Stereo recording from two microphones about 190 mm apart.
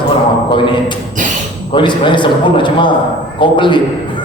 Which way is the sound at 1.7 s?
25° left (ahead or behind).